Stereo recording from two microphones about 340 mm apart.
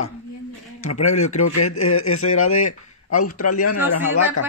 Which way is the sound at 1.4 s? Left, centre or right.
Left.